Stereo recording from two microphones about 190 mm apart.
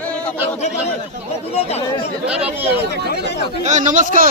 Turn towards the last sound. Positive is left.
turn(degrees=-45)  # may be behind; listen again after turning